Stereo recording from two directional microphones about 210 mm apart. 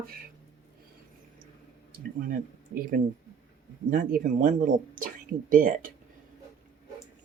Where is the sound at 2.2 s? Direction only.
45° right (ahead or behind).